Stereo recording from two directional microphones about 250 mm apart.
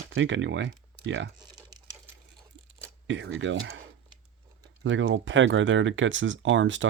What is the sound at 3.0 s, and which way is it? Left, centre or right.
Speech, right.